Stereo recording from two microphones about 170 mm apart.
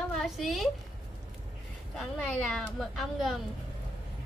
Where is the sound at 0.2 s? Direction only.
Centre (ahead or behind).